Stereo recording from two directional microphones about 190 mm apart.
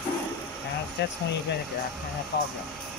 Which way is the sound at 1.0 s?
65° left (ahead or behind).